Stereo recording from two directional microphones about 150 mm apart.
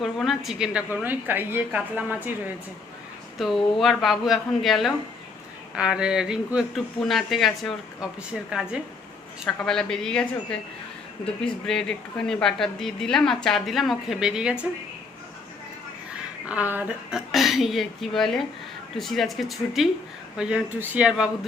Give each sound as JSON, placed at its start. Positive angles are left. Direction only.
{"t": 0.0, "sound": "a woman's voice", "side_deg": 0}
{"t": 3.3, "sound": "speech", "side_deg": 0}
{"t": 11.6, "sound": "speech", "side_deg": 5}
{"t": 16.5, "sound": "a woman's voice", "side_deg": -10}